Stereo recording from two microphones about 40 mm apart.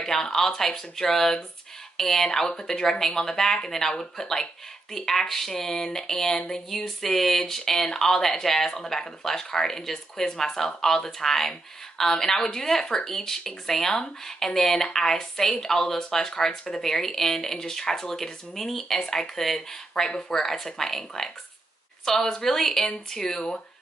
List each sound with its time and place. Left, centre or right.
0.0 s speech: centre